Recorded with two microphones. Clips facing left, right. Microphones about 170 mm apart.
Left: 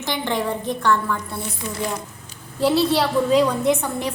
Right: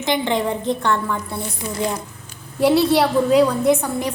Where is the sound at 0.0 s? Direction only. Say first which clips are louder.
Right 4 dB; 20° right (ahead or behind).